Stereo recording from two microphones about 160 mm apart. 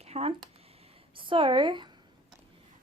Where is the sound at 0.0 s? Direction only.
40° right (ahead or behind).